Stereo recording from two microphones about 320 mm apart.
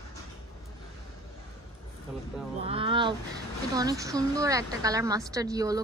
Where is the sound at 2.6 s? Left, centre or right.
Centre.